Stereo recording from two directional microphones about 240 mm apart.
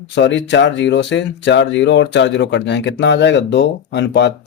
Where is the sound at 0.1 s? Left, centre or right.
Left.